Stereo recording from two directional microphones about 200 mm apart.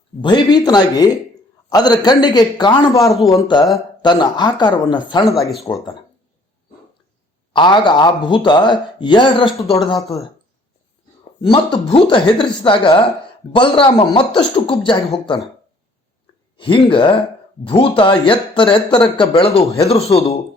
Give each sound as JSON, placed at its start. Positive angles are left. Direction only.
{"t": 0.2, "sound": "speech", "side_deg": 20}
{"t": 3.1, "sound": "speech", "side_deg": 0}
{"t": 3.3, "sound": "speech", "side_deg": 20}
{"t": 5.2, "sound": "speech", "side_deg": 0}
{"t": 7.5, "sound": "speech", "side_deg": 25}
{"t": 11.3, "sound": "speech", "side_deg": 25}
{"t": 16.6, "sound": "speech", "side_deg": 25}